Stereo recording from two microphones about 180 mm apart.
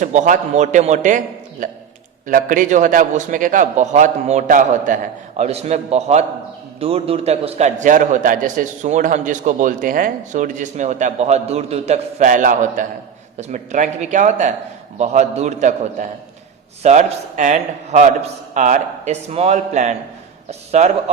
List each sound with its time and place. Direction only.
0.0 s a man's voice: 45° right (ahead or behind)